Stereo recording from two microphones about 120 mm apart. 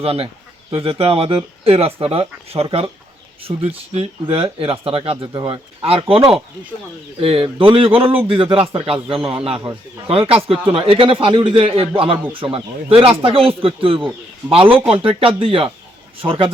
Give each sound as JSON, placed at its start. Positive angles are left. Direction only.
{"t": 0.0, "sound": "speech", "side_deg": -55}